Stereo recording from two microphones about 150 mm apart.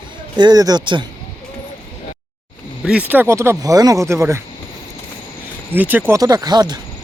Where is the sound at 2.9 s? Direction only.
10° right (ahead or behind).